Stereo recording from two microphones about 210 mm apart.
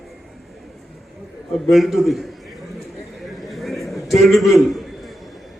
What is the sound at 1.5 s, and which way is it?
Speech, centre (ahead or behind).